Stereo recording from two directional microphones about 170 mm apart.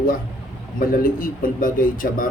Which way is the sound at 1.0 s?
55° left (ahead or behind).